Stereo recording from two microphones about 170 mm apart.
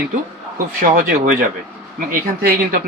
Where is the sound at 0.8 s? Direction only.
55° right (ahead or behind).